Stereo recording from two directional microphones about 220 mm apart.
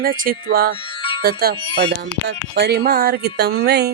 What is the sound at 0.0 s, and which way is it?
Speech, 40° right (ahead or behind).